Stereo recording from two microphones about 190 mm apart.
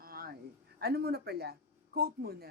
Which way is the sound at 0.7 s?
55° right (ahead or behind).